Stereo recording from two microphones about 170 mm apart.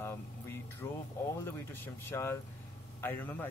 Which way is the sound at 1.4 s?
15° left (ahead or behind).